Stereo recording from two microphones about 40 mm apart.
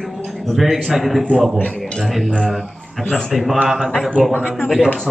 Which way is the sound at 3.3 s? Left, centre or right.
Centre.